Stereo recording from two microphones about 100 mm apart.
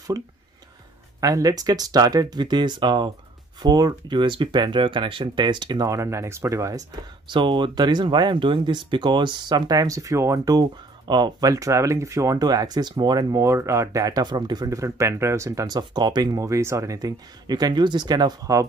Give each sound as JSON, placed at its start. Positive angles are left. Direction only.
{"t": 0.1, "sound": "speech", "side_deg": -35}
{"t": 5.9, "sound": "speech", "side_deg": -30}
{"t": 7.2, "sound": "speech", "side_deg": -55}
{"t": 14.8, "sound": "speech", "side_deg": -30}